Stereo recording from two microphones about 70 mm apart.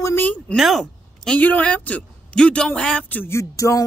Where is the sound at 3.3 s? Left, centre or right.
Left.